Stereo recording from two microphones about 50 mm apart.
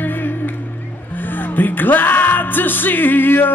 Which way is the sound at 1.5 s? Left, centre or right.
Left.